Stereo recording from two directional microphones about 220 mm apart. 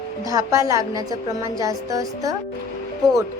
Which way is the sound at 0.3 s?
15° right (ahead or behind).